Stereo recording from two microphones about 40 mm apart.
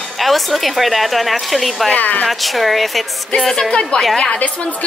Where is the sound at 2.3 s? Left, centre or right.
Centre.